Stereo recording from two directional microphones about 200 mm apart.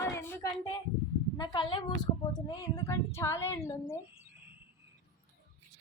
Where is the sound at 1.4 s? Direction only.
20° left (ahead or behind).